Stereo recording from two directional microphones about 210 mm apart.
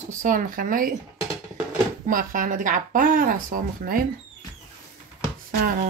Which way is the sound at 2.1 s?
40° right (ahead or behind).